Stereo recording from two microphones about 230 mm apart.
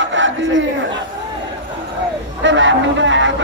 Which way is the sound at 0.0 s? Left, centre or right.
Right.